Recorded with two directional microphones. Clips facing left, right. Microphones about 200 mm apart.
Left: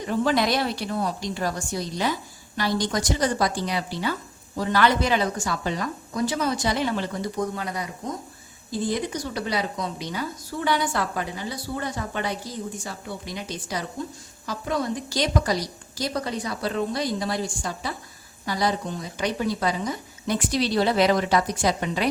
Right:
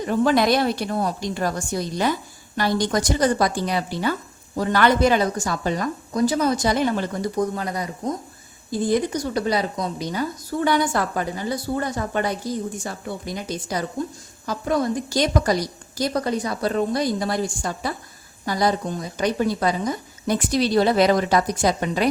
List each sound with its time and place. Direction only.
0.1 s a woman's voice: 50° right (ahead or behind)